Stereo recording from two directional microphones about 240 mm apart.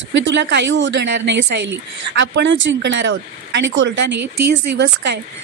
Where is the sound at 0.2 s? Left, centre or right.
Right.